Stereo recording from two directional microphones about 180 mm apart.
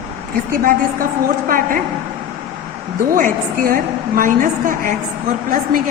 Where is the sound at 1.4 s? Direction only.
50° right (ahead or behind).